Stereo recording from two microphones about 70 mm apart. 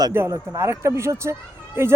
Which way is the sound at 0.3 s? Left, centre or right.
Right.